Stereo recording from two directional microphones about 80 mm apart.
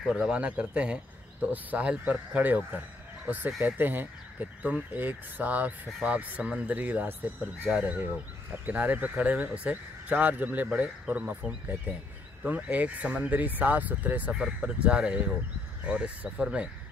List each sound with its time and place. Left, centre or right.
0.0 s speech: centre